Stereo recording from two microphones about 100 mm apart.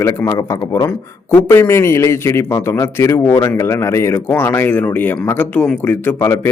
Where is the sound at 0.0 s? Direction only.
35° left (ahead or behind).